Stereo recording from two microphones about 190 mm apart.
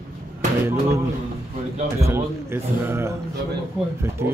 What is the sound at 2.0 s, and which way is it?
A man's voice, 15° right (ahead or behind).